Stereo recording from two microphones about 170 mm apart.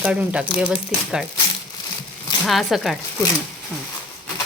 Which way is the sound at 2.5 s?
Centre (ahead or behind).